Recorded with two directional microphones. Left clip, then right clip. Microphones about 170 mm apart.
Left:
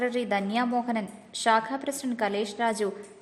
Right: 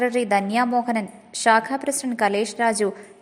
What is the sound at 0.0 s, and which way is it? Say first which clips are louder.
A woman's voice: right 7 dB; 20° right (ahead or behind).